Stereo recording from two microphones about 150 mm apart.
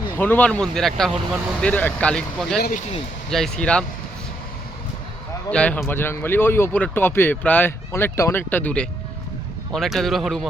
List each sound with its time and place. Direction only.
0.2 s speech: 10° left (ahead or behind)
2.6 s speech: 75° left (ahead or behind)
3.2 s speech: 5° left (ahead or behind)
5.5 s speech: 10° left (ahead or behind)